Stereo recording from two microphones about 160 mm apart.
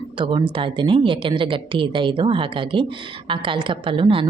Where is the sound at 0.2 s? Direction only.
30° right (ahead or behind).